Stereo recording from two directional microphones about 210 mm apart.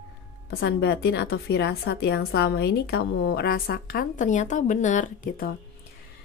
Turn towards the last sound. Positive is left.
turn(degrees=40)  # may be behind; listen again after turning